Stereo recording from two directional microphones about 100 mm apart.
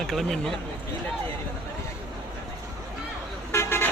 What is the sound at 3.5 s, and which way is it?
Vehicle, 20° left (ahead or behind).